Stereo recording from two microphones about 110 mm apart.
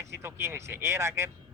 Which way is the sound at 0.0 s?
25° right (ahead or behind).